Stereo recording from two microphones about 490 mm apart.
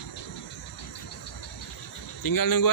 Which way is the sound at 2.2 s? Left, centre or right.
Left.